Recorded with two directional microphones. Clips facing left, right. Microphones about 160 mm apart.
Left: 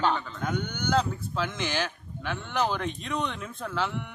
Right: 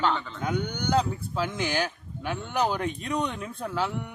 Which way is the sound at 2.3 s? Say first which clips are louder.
Right 1 dB; 10° right (ahead or behind).